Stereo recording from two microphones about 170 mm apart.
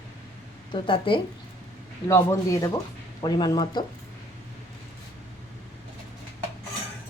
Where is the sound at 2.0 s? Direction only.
15° left (ahead or behind).